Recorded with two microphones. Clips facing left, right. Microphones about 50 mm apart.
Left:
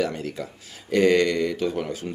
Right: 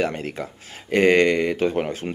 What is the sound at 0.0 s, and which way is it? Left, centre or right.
Speech, right.